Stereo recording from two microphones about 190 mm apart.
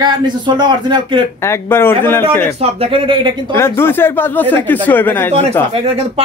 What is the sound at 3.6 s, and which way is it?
Speech, 10° left (ahead or behind).